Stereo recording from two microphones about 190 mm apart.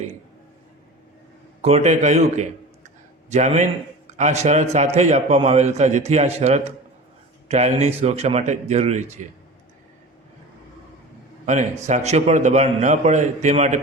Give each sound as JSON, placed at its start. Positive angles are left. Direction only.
{"t": 1.6, "sound": "a man's voice", "side_deg": -35}
{"t": 11.9, "sound": "a man's voice", "side_deg": -35}